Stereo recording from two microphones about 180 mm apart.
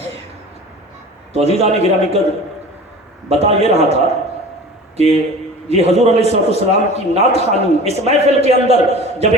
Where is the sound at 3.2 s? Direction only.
35° right (ahead or behind).